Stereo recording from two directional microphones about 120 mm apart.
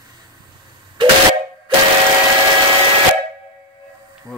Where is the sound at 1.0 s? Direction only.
45° right (ahead or behind).